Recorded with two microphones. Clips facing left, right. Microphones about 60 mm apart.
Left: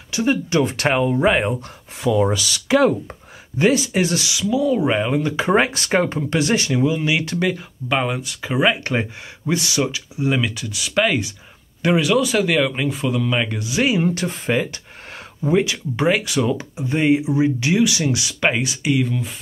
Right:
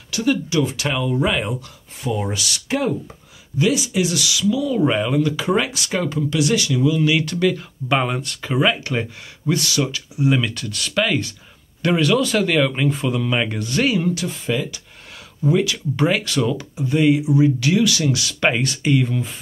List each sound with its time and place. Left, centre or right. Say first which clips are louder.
0.1 s speech: left 1 dB; left
1.1 s speech: left 3 dB; left
2.8 s speech: left 5 dB; left
7.9 s speech: right 1 dB; centre
10.3 s speech: right 1 dB; centre
13.8 s speech: left 1 dB; left
14.4 s a sound: left 2 dB; left
15.4 s speech: even; left
18.4 s speech: right 1 dB; centre